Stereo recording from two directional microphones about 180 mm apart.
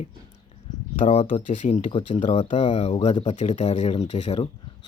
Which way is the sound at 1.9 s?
30° left (ahead or behind).